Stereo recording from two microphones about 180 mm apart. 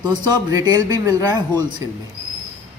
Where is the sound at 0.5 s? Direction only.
20° right (ahead or behind).